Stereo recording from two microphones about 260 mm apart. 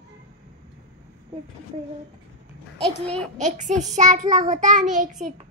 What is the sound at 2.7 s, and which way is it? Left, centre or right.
Speech, centre.